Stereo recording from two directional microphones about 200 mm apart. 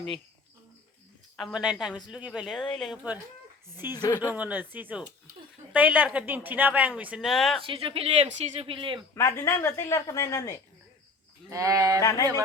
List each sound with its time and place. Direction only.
1.4 s speech: centre (ahead or behind)
3.9 s speech: 20° left (ahead or behind)
4.4 s speech: 10° right (ahead or behind)
7.6 s speech: 25° right (ahead or behind)
9.1 s speech: 15° left (ahead or behind)
11.4 s speech: 15° right (ahead or behind)